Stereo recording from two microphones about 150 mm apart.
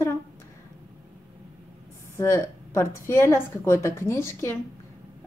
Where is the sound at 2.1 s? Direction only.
20° left (ahead or behind).